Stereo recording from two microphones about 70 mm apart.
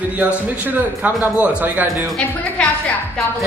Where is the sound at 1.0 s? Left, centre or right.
Centre.